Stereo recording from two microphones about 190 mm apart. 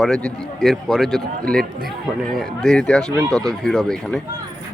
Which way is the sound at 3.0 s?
20° right (ahead or behind).